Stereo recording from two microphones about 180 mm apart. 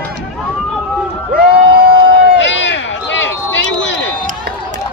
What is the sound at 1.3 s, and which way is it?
Crowd, 55° right (ahead or behind).